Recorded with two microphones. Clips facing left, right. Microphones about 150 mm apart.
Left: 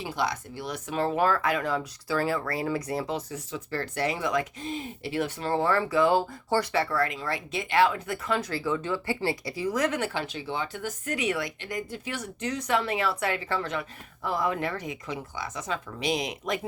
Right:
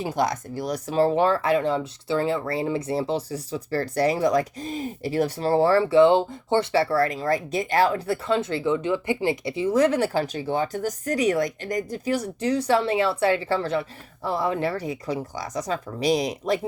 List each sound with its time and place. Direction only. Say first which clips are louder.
0.0 s speech: right 5 dB; 45° right (ahead or behind)